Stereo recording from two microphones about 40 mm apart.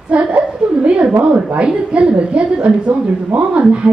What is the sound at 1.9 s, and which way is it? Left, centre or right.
A woman's voice, right.